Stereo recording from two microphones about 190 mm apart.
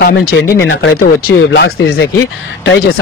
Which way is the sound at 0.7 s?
70° left (ahead or behind).